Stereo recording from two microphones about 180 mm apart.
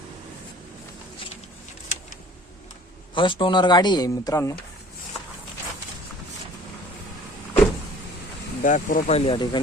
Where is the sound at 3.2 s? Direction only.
25° left (ahead or behind).